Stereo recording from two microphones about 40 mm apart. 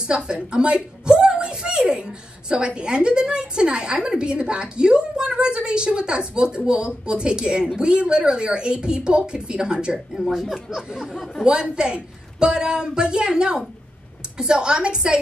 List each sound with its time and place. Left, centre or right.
0.0 s a woman's voice: right
10.1 s a sound: centre
11.7 s a woman's voice: right